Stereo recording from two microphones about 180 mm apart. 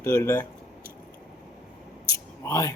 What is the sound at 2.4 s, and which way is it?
Speech, 15° left (ahead or behind).